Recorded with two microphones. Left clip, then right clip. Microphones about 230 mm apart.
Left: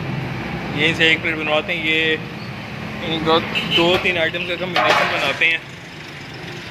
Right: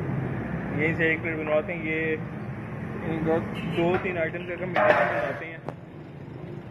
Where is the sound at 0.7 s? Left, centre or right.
Centre.